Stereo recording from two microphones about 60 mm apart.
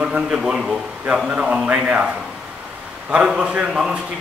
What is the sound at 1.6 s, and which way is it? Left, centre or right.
Speech, right.